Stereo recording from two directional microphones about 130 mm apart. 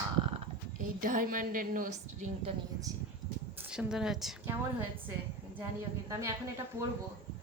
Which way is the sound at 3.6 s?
5° right (ahead or behind).